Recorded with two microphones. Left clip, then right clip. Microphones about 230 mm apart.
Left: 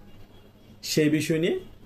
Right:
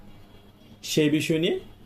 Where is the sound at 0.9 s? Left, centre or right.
Centre.